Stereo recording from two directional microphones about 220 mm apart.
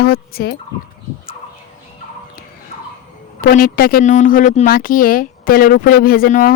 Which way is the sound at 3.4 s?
40° left (ahead or behind).